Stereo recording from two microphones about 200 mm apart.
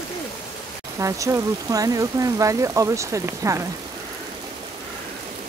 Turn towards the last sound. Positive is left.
turn(degrees=-15)  # may be behind; listen again after turning